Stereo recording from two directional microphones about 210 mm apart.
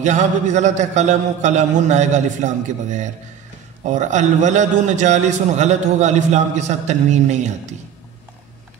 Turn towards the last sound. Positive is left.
turn(degrees=-35)  # may be behind; listen again after turning